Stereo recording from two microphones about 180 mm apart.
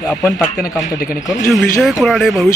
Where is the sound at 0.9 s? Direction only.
55° left (ahead or behind).